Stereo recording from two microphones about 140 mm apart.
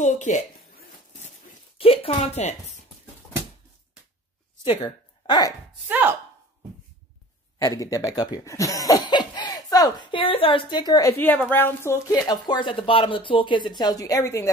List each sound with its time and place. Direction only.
0.0 s a sound: 60° left (ahead or behind)
1.8 s speech: 40° left (ahead or behind)
4.6 s speech: 35° left (ahead or behind)
5.9 s speech: 10° right (ahead or behind)
7.5 s speech: 25° left (ahead or behind)
11.1 s speech: 10° left (ahead or behind)